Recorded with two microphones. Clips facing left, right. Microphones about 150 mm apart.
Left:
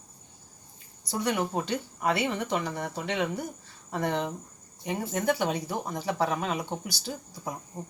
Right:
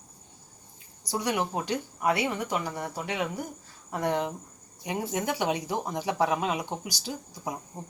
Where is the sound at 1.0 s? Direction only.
10° right (ahead or behind).